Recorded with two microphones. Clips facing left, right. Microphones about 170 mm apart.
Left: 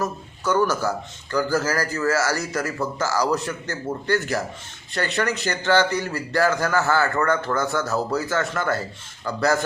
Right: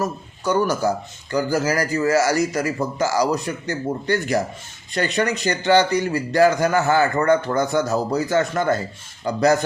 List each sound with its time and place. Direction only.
0.0 s a man's voice: 15° right (ahead or behind)